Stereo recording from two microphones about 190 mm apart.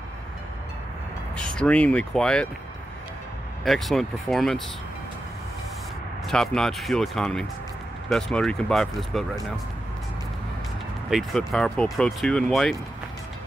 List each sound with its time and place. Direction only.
1.3 s speech: 5° left (ahead or behind)
3.6 s speech: centre (ahead or behind)
6.2 s speech: centre (ahead or behind)
11.1 s speech: centre (ahead or behind)